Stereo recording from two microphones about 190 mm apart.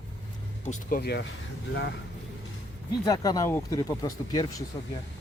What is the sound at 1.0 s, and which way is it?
Speech, 60° left (ahead or behind).